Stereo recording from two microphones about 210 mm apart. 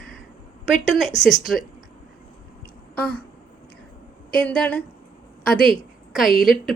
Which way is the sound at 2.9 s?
5° left (ahead or behind).